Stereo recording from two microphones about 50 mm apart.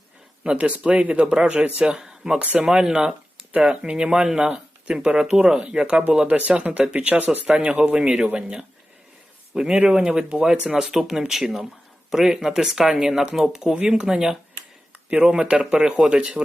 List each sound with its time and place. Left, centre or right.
0.4 s speech: right
1.5 s speech: right
1.8 s speech: centre
6.1 s speech: right
9.8 s speech: centre
15.4 s speech: right